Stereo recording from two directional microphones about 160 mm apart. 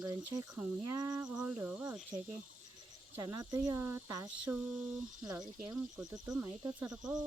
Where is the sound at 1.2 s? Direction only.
5° right (ahead or behind).